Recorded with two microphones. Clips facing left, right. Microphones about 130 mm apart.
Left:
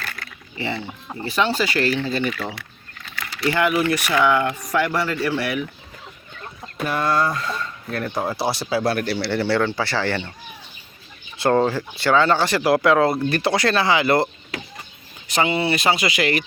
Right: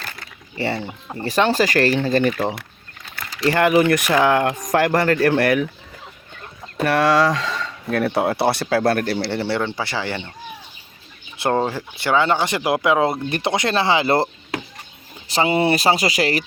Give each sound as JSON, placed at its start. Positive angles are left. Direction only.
{"t": 0.5, "sound": "speech", "side_deg": -40}
{"t": 3.5, "sound": "speech", "side_deg": -40}
{"t": 3.8, "sound": "speech", "side_deg": -55}
{"t": 4.1, "sound": "speech", "side_deg": -40}
{"t": 6.7, "sound": "speech", "side_deg": -85}
{"t": 9.3, "sound": "speech", "side_deg": -25}
{"t": 11.3, "sound": "speech", "side_deg": -20}
{"t": 15.5, "sound": "speech", "side_deg": -40}